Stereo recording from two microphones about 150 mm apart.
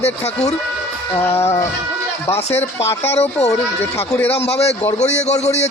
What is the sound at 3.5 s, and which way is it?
Speech, 20° left (ahead or behind).